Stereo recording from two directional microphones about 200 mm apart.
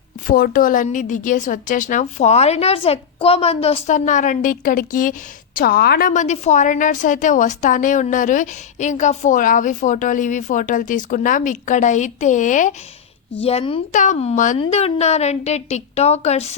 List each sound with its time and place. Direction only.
0.3 s a woman's voice: 45° left (ahead or behind); by 13.8 s 30° left (ahead or behind)
13.9 s a woman's voice: 40° left (ahead or behind)